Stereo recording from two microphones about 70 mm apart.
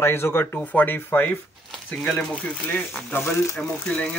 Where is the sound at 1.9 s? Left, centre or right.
Centre.